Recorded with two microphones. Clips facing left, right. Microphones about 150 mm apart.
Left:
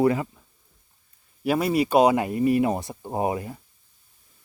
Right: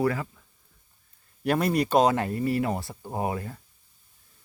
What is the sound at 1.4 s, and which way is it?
Speech, 5° left (ahead or behind).